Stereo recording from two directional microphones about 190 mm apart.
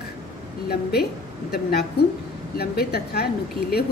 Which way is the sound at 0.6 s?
55° left (ahead or behind).